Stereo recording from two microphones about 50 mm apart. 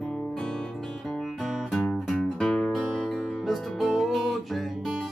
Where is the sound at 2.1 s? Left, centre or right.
Centre.